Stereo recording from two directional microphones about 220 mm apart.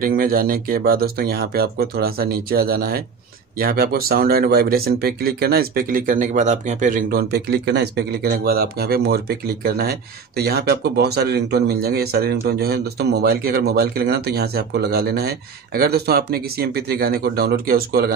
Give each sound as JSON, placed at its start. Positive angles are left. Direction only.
{"t": 0.0, "sound": "speech", "side_deg": -40}